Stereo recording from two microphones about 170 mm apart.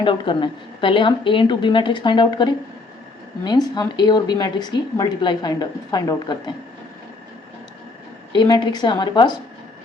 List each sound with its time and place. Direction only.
0.0 s speech: 30° left (ahead or behind)
8.3 s speech: 25° left (ahead or behind)